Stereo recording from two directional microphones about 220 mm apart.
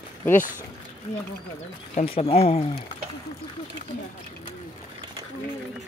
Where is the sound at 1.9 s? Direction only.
25° left (ahead or behind).